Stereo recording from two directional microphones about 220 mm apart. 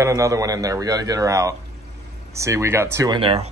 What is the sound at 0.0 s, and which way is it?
Speech, 15° right (ahead or behind).